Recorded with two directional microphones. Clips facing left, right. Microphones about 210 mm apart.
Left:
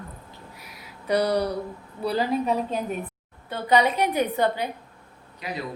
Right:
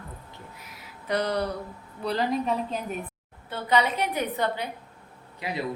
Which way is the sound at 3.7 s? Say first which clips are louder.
Left 4 dB; 10° left (ahead or behind).